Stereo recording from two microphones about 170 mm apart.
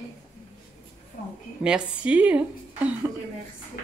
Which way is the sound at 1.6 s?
5° right (ahead or behind).